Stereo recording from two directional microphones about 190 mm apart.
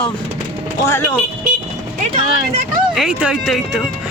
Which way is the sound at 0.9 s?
10° left (ahead or behind).